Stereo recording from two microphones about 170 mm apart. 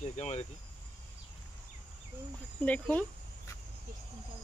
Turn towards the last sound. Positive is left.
turn(degrees=10)  # may be behind; listen again after turning